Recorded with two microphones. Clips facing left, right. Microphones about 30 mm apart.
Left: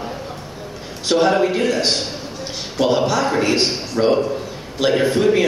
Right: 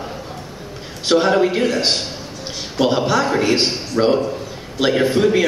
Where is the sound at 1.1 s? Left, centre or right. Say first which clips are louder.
Right 1 dB; centre.